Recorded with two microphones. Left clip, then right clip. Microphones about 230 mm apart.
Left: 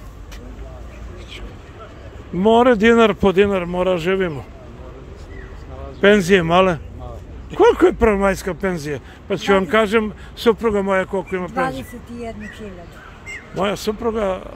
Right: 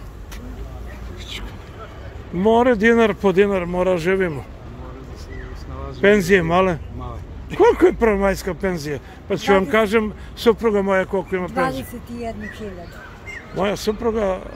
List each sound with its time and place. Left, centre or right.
2.3 s a man's voice: centre
5.9 s a man's voice: centre